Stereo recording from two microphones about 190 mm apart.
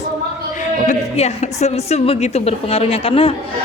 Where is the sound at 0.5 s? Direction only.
35° left (ahead or behind).